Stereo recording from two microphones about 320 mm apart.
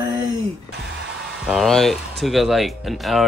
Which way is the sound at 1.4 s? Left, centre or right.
Centre.